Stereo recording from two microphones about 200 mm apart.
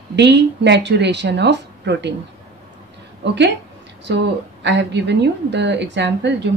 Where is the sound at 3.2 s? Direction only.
60° right (ahead or behind).